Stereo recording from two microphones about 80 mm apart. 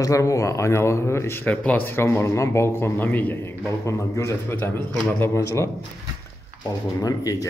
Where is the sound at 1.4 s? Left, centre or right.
Centre.